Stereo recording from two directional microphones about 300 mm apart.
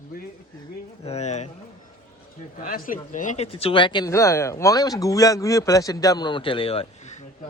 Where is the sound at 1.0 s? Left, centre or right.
Left.